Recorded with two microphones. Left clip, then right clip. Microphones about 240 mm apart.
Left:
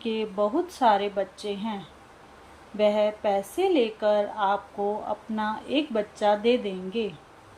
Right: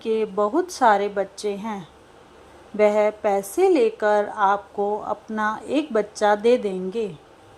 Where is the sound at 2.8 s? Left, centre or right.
Centre.